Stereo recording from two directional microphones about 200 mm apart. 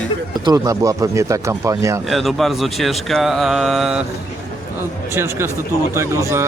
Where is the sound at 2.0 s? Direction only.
Centre (ahead or behind).